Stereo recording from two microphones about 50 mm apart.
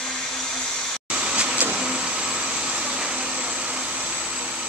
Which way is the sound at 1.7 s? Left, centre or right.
Right.